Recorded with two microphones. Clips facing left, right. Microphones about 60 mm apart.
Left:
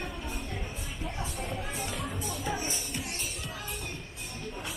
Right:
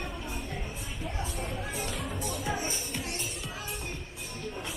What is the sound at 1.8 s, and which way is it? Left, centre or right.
Music, centre.